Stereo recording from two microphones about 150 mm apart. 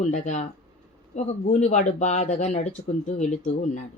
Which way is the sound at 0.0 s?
55° left (ahead or behind).